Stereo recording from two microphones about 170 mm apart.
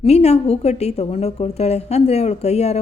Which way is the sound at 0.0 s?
40° left (ahead or behind).